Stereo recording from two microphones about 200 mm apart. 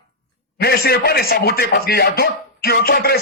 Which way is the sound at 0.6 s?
50° left (ahead or behind).